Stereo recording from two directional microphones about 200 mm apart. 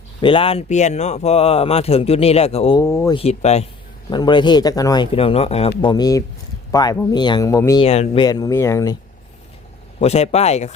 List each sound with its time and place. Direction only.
0.2 s speech: 25° left (ahead or behind)
2.8 s speech: 15° left (ahead or behind)
3.2 s speech: 30° left (ahead or behind)
7.9 s speech: 30° left (ahead or behind)
10.0 s speech: 30° left (ahead or behind)